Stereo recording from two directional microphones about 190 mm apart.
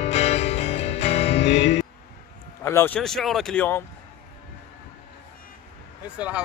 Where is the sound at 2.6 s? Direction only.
10° left (ahead or behind).